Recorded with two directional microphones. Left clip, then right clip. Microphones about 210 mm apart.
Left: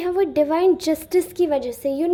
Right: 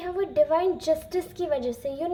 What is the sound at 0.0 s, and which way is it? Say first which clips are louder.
A woman's voice: left 4 dB; 40° left (ahead or behind).